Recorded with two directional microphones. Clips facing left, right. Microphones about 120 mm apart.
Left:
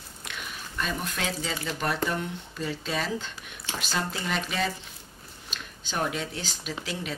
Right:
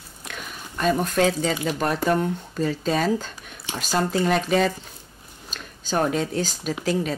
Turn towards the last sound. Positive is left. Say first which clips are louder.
# right 10 dB
turn(degrees=-40)  # may be behind; listen again after turning